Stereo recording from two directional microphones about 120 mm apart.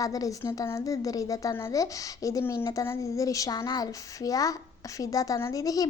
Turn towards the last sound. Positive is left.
turn(degrees=30)  # may be behind; listen again after turning